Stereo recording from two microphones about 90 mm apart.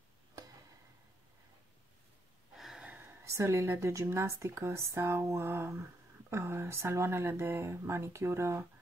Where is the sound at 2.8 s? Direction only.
20° right (ahead or behind).